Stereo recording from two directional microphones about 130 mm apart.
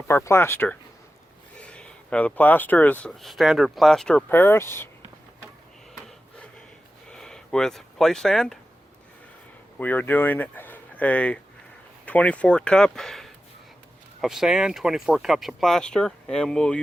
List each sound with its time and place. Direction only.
0.1 s speech: 20° left (ahead or behind)
4.3 s speech: 15° left (ahead or behind)
7.1 s speech: 5° left (ahead or behind)
9.7 s speech: 15° left (ahead or behind)